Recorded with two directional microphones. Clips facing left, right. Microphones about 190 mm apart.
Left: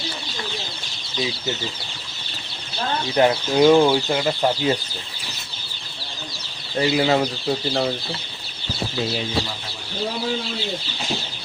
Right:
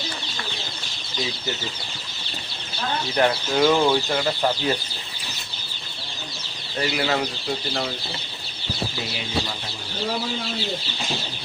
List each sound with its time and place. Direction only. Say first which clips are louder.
3.2 s speech: left 4 dB; 20° left (ahead or behind)
6.9 s speech: left 6 dB; 20° left (ahead or behind)